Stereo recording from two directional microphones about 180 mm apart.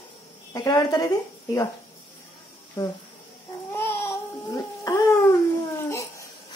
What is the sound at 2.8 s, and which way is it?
Speech, 20° left (ahead or behind).